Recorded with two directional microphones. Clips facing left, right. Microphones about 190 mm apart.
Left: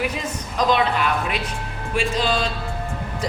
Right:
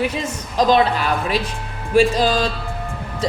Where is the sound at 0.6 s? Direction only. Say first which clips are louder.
Right 4 dB; 35° right (ahead or behind).